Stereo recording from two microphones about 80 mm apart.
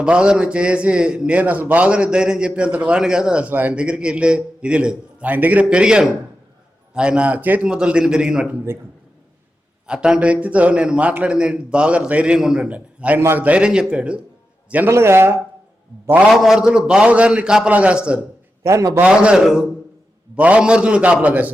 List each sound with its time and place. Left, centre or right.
0.0 s a man's voice: centre
9.8 s a man's voice: centre
13.1 s speech: right
13.4 s a man's voice: centre
14.8 s speech: right
16.3 s a man's voice: centre
18.6 s speech: right
19.0 s a man's voice: centre